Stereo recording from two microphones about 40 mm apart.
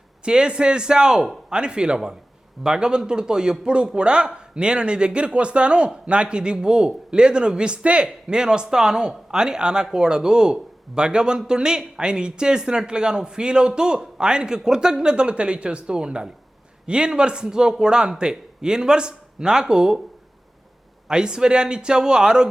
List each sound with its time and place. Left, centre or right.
0.3 s speech: right
21.1 s speech: centre